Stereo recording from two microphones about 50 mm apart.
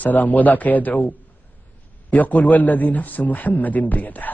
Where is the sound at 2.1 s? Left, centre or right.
Left.